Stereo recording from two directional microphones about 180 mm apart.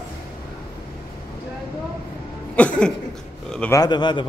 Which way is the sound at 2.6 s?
5° left (ahead or behind).